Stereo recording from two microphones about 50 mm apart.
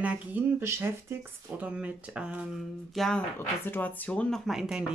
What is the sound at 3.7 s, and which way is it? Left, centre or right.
Speech, left.